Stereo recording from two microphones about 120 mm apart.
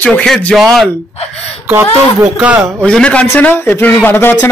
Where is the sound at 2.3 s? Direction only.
10° right (ahead or behind).